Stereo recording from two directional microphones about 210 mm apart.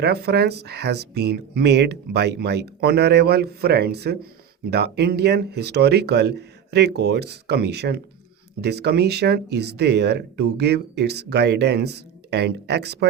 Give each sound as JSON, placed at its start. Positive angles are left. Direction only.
{"t": 0.0, "sound": "speech", "side_deg": -50}